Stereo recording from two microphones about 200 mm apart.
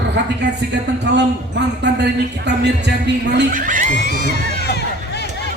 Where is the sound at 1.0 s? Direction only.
60° right (ahead or behind).